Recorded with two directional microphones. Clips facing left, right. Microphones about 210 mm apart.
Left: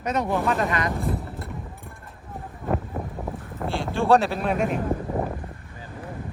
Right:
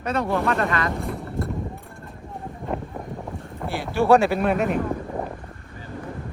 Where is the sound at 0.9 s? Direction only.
Centre (ahead or behind).